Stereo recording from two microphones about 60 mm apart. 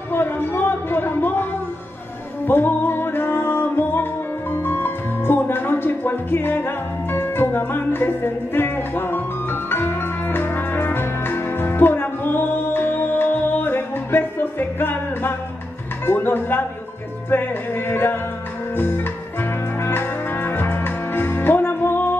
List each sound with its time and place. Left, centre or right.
0.1 s a sound: left
2.4 s music: left
16.1 s speech: left
17.3 s music: left
19.8 s music: left